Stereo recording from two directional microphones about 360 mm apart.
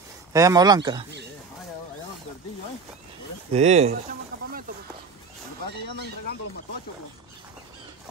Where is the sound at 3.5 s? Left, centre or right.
Centre.